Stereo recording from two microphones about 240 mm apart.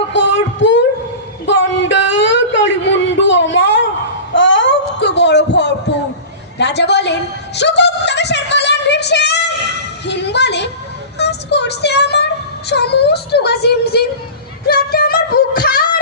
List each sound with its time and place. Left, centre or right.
0.3 s a sound: left
10.1 s a woman's voice: left
11.2 s child singing: left